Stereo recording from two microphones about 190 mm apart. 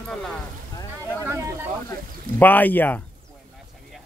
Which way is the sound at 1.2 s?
15° right (ahead or behind).